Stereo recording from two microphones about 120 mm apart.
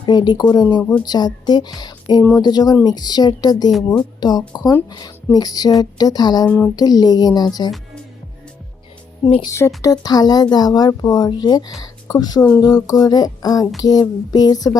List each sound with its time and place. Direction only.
0.0 s speech: 35° left (ahead or behind)
9.5 s speech: 25° left (ahead or behind)